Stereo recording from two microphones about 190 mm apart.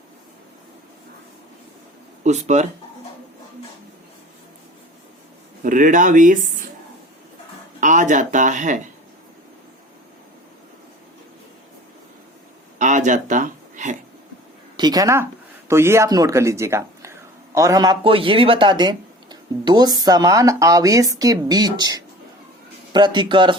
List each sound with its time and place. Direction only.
2.2 s speech: 35° right (ahead or behind)
5.6 s speech: 45° right (ahead or behind)
7.8 s speech: 40° right (ahead or behind)
12.8 s a sound: 40° right (ahead or behind)
14.8 s speech: 20° right (ahead or behind)